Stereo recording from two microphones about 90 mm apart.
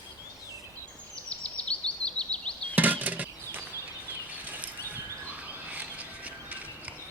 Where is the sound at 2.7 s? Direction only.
20° right (ahead or behind).